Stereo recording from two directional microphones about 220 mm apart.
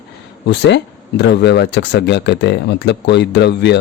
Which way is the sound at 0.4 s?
50° left (ahead or behind).